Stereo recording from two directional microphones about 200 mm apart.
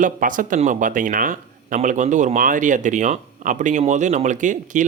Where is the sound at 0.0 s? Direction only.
40° right (ahead or behind).